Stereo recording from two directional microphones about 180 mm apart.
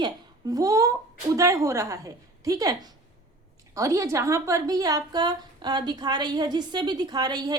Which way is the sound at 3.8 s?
15° right (ahead or behind).